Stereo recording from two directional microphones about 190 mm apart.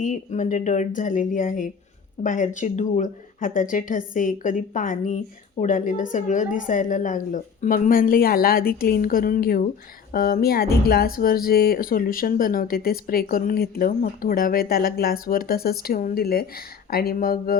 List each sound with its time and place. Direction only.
0.0 s speech: 40° left (ahead or behind)